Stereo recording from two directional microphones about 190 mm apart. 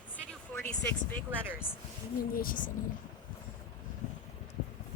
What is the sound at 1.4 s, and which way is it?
Speech, 10° right (ahead or behind).